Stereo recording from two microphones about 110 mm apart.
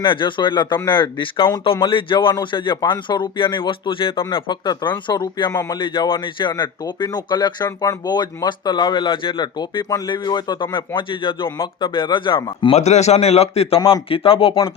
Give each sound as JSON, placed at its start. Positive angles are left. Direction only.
{"t": 0.0, "sound": "speech", "side_deg": 50}
{"t": 12.7, "sound": "a man's voice", "side_deg": 90}